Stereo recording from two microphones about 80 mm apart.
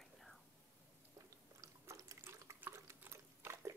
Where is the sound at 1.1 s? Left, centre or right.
Right.